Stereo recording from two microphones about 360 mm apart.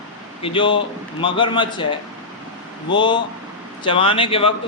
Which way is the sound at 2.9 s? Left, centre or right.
Centre.